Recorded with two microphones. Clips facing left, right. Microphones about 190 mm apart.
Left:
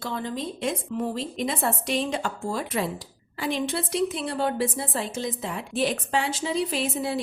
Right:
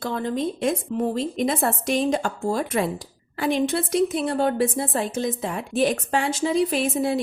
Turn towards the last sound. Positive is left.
turn(degrees=-50)  # may be behind; listen again after turning